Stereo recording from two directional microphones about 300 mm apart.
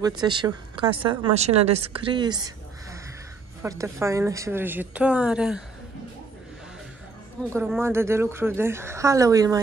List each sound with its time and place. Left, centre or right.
0.2 s a woman's voice: centre
7.4 s a woman's voice: centre